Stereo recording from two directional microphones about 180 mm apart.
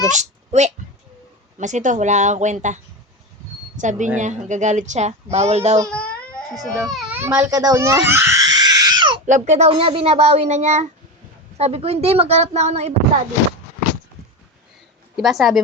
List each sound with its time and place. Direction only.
0.1 s a child's voice: 40° right (ahead or behind)
5.9 s baby cry: 5° left (ahead or behind); by 9.2 s 25° right (ahead or behind)
9.2 s a child's voice: 40° right (ahead or behind)
15.1 s speech: centre (ahead or behind)